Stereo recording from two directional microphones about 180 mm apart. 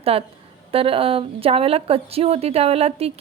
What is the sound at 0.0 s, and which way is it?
A woman's voice, 35° right (ahead or behind).